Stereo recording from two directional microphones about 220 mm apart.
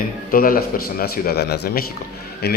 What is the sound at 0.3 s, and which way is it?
Speech, 40° left (ahead or behind).